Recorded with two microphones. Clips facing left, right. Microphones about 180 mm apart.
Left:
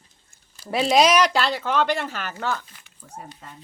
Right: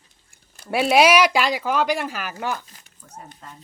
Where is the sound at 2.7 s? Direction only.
45° right (ahead or behind).